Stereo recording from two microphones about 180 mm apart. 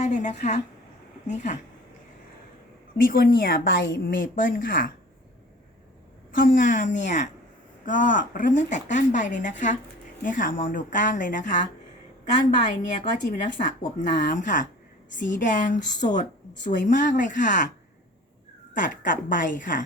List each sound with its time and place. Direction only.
0.0 s speech: 40° left (ahead or behind)
3.0 s speech: 55° left (ahead or behind)
6.3 s speech: 50° left (ahead or behind)
12.6 s speech: 45° left (ahead or behind)
18.8 s speech: 45° left (ahead or behind)